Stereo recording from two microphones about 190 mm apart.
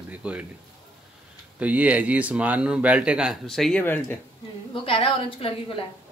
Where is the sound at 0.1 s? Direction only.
5° right (ahead or behind).